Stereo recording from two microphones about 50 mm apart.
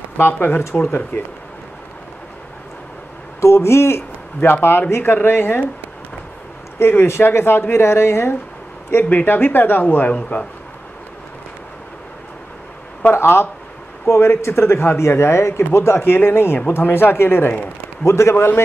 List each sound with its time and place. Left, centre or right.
0.2 s speech: left
3.3 s speech: left
4.4 s speech: left
6.8 s speech: left
8.9 s speech: left
13.1 s speech: left
18.0 s a man's voice: left
18.3 s speech: left